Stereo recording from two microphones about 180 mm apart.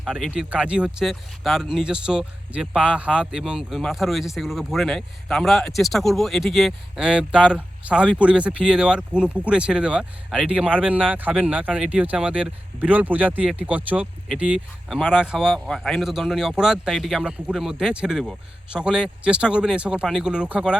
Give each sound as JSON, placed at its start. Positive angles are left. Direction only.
{"t": 0.0, "sound": "speech", "side_deg": -5}